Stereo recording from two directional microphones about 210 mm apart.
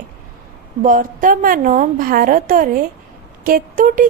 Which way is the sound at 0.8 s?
40° right (ahead or behind).